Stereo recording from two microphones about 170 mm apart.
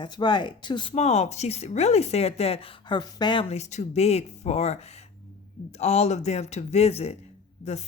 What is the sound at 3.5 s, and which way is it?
Speech, 40° left (ahead or behind).